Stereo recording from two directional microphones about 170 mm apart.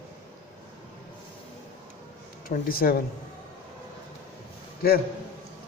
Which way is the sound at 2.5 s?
60° left (ahead or behind).